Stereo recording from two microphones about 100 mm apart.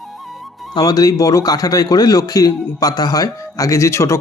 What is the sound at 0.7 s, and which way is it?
Speech, 40° left (ahead or behind).